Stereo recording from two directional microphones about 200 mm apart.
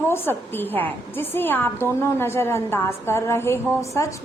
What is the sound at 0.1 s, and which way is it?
A woman's voice, 10° left (ahead or behind).